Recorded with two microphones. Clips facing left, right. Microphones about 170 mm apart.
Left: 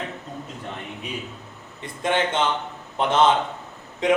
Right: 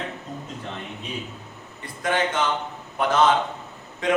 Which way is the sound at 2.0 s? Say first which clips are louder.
Left 1 dB; 25° left (ahead or behind).